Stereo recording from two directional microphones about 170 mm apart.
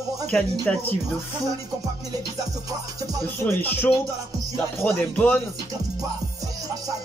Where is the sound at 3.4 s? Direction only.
10° left (ahead or behind).